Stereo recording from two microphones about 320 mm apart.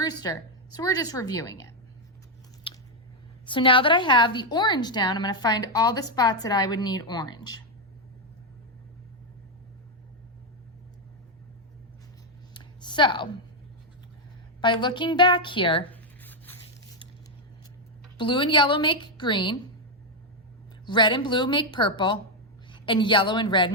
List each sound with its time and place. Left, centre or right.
0.0 s a woman's voice: centre
2.7 s chewing: centre
3.4 s a woman's voice: centre
12.5 s a sound: centre
14.6 s a woman's voice: centre
15.9 s writing: centre
18.2 s a woman's voice: centre
20.8 s a woman's voice: centre